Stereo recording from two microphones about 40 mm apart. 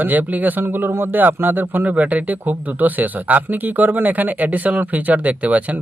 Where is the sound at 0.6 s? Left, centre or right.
Right.